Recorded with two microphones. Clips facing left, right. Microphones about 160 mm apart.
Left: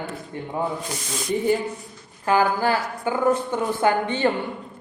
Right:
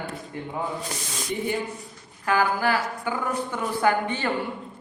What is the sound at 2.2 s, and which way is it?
A woman's voice, 25° left (ahead or behind).